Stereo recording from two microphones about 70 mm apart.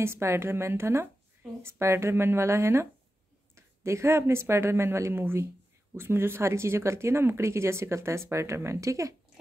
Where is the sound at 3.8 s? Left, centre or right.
Right.